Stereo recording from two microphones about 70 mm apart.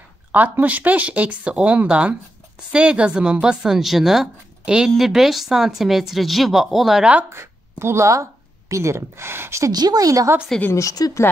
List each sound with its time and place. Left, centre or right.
0.3 s a woman's voice: right; by 7.1 s centre
7.2 s speech: right
9.7 s speech: right
10.7 s speech: left